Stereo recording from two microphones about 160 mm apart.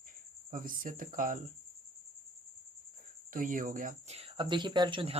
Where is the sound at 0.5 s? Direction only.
60° right (ahead or behind).